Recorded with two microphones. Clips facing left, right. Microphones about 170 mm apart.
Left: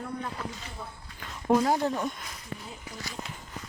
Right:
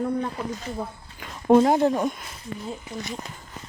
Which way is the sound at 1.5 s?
25° right (ahead or behind).